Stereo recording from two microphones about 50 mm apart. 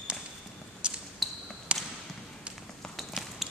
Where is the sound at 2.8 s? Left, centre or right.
Centre.